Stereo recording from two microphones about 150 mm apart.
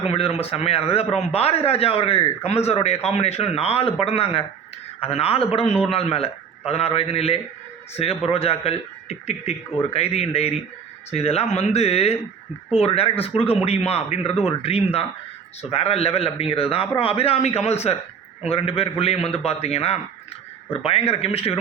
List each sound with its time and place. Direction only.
0.0 s a man's voice: 40° left (ahead or behind)